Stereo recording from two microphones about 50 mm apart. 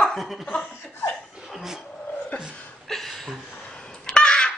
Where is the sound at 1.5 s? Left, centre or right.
Centre.